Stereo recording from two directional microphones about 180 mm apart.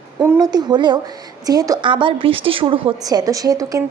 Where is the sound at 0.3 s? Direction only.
20° right (ahead or behind).